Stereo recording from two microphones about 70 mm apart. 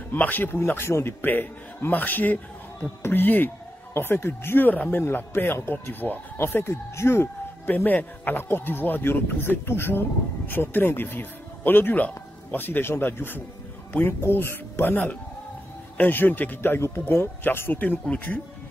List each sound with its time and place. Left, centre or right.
0.1 s speech: left
7.6 s speech: left